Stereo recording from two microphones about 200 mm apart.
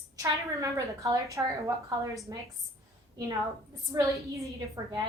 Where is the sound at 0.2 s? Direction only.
15° right (ahead or behind).